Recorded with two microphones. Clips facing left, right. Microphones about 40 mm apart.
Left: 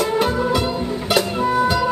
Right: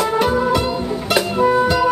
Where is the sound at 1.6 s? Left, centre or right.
Centre.